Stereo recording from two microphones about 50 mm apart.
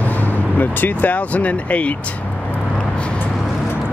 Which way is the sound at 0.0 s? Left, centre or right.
Left.